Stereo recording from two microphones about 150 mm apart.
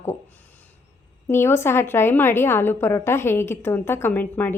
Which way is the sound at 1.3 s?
15° left (ahead or behind).